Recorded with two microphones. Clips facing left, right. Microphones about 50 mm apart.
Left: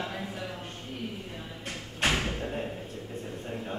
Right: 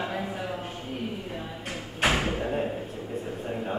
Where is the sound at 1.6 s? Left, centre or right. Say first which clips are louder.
Right 3 dB; centre.